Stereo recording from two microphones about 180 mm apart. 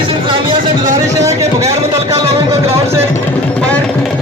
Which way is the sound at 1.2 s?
15° right (ahead or behind).